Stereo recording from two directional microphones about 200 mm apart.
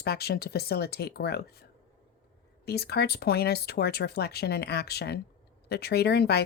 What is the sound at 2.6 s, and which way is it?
Speech, 55° left (ahead or behind).